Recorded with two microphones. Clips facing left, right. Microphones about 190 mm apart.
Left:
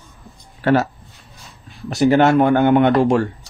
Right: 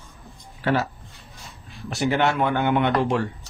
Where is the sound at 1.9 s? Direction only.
40° left (ahead or behind).